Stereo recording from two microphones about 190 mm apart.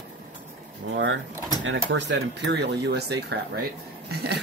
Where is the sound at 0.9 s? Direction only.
80° right.